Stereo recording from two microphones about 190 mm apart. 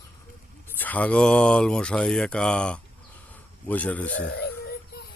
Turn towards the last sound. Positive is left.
turn(degrees=55)  # may be behind; listen again after turning